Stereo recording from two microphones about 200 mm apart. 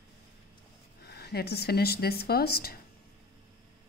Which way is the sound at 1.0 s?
55° left (ahead or behind).